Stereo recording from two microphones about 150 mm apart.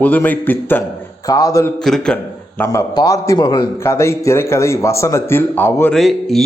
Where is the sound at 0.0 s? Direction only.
10° left (ahead or behind).